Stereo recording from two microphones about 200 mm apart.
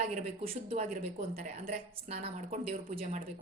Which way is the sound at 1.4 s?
35° right (ahead or behind).